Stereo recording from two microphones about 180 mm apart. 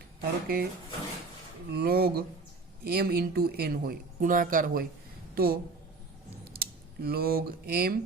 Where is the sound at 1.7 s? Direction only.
60° right (ahead or behind).